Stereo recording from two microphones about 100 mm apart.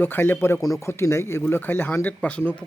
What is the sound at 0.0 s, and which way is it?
Speech, 20° left (ahead or behind).